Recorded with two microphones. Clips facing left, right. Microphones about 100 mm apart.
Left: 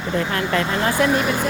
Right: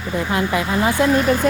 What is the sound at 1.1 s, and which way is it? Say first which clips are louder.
Speech: right 4 dB; 20° left (ahead or behind).